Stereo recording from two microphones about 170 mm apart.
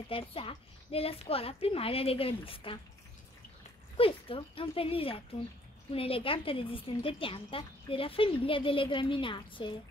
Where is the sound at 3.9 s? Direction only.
30° left (ahead or behind).